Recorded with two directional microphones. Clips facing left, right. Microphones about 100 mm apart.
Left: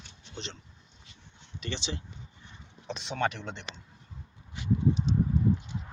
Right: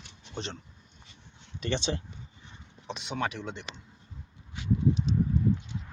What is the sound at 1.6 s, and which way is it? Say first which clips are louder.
Speech: right 6 dB; 50° right (ahead or behind).